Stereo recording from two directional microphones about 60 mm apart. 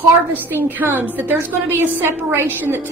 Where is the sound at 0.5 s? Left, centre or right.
Right.